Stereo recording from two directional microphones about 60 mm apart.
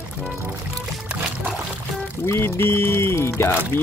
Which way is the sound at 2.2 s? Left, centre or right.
Left.